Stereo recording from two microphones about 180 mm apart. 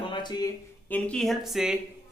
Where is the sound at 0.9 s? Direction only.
10° left (ahead or behind).